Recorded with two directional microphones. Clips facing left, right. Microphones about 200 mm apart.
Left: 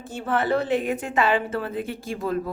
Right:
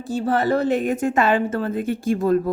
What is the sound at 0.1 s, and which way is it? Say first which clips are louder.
A woman's voice: right 4 dB; 40° right (ahead or behind).